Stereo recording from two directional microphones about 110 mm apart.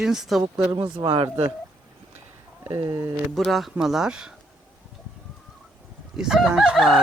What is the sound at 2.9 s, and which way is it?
Speech, 35° right (ahead or behind).